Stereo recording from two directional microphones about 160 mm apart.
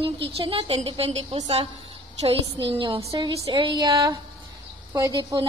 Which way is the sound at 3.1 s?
20° right (ahead or behind).